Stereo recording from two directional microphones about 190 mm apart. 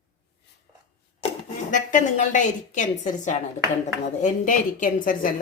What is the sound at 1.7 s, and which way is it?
Speech, 40° left (ahead or behind).